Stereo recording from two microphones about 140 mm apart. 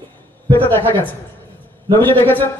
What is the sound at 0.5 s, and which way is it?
A man's voice, 15° left (ahead or behind).